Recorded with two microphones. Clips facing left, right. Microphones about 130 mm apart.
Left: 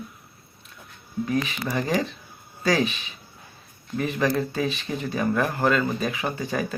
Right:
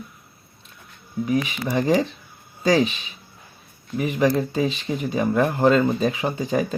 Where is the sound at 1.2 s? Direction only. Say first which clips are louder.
Right 3 dB; 15° right (ahead or behind).